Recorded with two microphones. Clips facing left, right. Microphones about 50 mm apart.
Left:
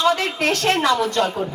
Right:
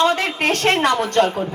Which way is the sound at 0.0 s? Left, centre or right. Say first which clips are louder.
Right 1 dB; right.